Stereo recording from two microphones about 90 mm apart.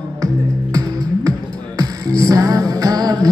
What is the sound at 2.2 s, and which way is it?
Music, 40° right (ahead or behind).